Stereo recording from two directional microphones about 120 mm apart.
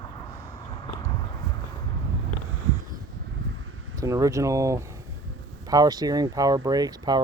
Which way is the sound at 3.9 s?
30° right (ahead or behind).